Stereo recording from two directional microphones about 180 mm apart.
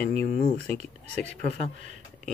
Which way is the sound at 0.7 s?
35° right (ahead or behind).